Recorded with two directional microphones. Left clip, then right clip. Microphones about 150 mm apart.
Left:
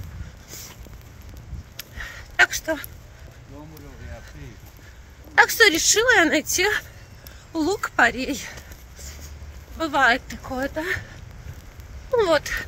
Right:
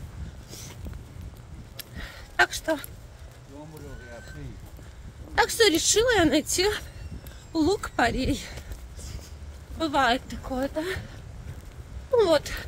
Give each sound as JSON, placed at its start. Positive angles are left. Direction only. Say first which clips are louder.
{"t": 1.8, "sound": "a sound", "louder": "left 5 dB", "side_deg": -5}
{"t": 5.3, "sound": "speech", "louder": "left 5 dB", "side_deg": -10}
{"t": 9.8, "sound": "speech", "louder": "left 4 dB", "side_deg": -5}
{"t": 12.2, "sound": "speech", "louder": "left 2 dB", "side_deg": -10}